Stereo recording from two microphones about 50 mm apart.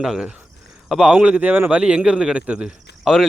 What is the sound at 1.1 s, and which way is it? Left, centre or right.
Speech, right.